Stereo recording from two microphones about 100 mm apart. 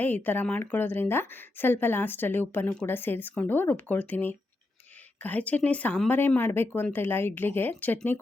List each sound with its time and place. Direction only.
0.0 s speech: 20° left (ahead or behind)